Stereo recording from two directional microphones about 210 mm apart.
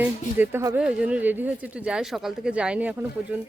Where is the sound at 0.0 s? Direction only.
10° right (ahead or behind).